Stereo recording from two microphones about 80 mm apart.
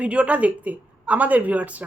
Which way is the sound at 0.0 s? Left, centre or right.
Centre.